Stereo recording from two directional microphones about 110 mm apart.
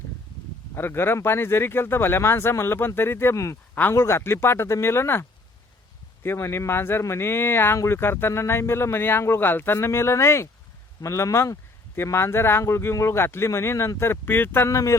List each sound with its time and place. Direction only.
0.7 s speech: 20° left (ahead or behind)
6.2 s speech: 25° left (ahead or behind)